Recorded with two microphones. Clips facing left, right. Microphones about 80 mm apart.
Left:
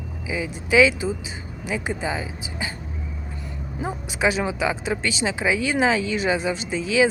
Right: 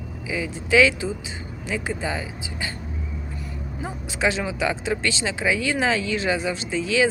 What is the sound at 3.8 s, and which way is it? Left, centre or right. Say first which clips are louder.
Speech: left 2 dB; centre.